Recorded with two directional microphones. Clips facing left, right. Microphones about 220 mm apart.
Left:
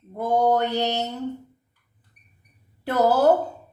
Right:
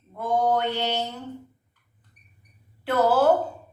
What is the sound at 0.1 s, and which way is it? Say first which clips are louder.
Mantra: left 3 dB; 40° left (ahead or behind).